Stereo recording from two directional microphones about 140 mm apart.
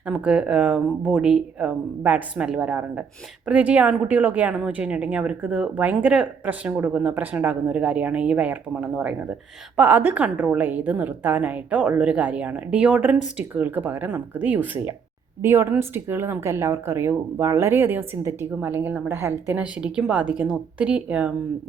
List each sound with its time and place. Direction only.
0.1 s speech: 10° right (ahead or behind)